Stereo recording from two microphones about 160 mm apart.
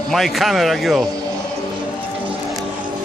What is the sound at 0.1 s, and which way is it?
Speech, centre (ahead or behind).